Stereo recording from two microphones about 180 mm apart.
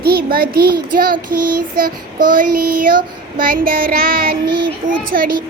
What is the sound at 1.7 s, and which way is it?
A child's voice, 50° right (ahead or behind).